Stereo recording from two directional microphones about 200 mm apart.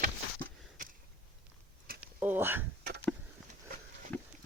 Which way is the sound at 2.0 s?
10° right (ahead or behind).